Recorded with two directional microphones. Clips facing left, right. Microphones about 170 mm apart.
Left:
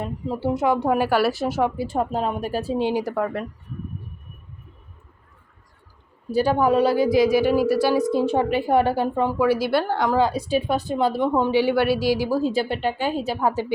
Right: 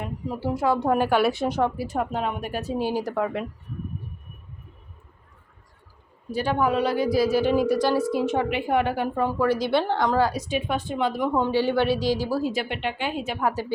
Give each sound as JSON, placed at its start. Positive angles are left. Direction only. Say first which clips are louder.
{"t": 0.0, "sound": "a woman's voice", "louder": "left 3 dB", "side_deg": 25}
{"t": 1.7, "sound": "a woman's voice", "louder": "left 3 dB", "side_deg": 25}
{"t": 3.0, "sound": "a woman's voice", "louder": "left 2 dB", "side_deg": 10}
{"t": 6.3, "sound": "a woman's voice", "louder": "left 5 dB", "side_deg": 35}
{"t": 8.1, "sound": "a woman's voice", "louder": "left 3 dB", "side_deg": 30}
{"t": 9.1, "sound": "a woman's voice", "louder": "left 1 dB", "side_deg": 15}
{"t": 10.2, "sound": "a woman's voice", "louder": "left 4 dB", "side_deg": 20}
{"t": 10.5, "sound": "a woman's voice", "louder": "left 4 dB", "side_deg": 35}
{"t": 11.3, "sound": "a woman's voice", "louder": "left 2 dB", "side_deg": 15}
{"t": 12.4, "sound": "a woman's voice", "louder": "left 4 dB", "side_deg": 30}